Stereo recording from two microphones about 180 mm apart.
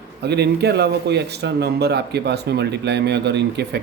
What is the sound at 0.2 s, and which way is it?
Speech, 65° right (ahead or behind).